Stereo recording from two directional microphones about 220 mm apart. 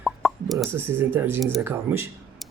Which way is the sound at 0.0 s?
Centre (ahead or behind).